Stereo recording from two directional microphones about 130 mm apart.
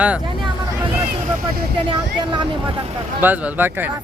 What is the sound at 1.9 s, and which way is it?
Speech, 35° right (ahead or behind).